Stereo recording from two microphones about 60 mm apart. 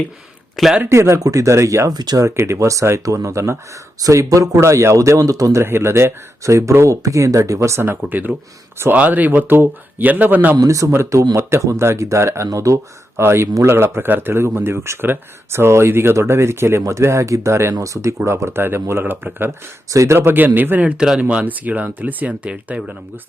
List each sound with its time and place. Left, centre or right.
0.5 s a man's voice: centre
0.9 s speech: right
1.2 s speech: right
4.0 s speech: right
4.6 s speech: right
6.4 s speech: right
8.0 s speech: right
10.6 s speech: right
10.9 s speech: right
17.7 s speech: right
18.3 s speech: right
19.9 s speech: right
20.1 s speech: right